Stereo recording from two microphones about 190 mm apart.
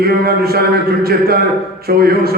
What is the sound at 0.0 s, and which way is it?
Music, 55° right (ahead or behind).